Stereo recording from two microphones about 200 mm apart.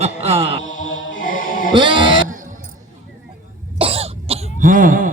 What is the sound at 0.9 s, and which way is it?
Music, 80° left.